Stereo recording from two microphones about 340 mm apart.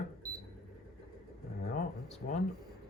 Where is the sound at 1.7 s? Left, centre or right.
Centre.